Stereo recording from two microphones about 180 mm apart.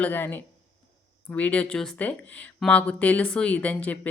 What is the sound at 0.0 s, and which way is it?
Speech, 10° left (ahead or behind).